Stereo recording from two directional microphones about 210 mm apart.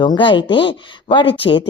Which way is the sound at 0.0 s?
20° left (ahead or behind).